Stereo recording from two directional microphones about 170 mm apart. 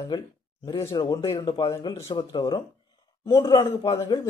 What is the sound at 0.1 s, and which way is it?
A man's voice, 25° left (ahead or behind).